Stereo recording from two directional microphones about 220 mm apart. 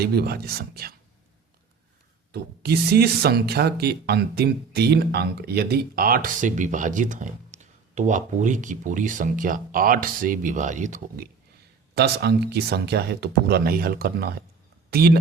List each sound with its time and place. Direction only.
0.0 s speech: 45° right (ahead or behind)
2.3 s speech: 45° right (ahead or behind)
11.9 s speech: 45° right (ahead or behind)